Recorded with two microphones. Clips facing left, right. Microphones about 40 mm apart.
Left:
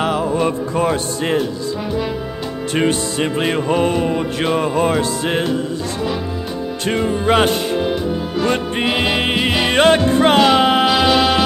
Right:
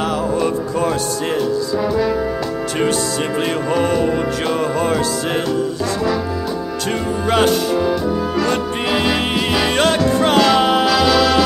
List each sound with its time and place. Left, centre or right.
0.0 s music: left
2.7 s music: left
6.9 s music: left